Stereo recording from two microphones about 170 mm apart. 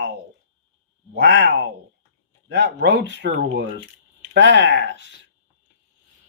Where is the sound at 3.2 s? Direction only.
90° right.